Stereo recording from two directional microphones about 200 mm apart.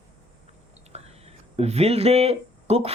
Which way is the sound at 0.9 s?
30° right (ahead or behind).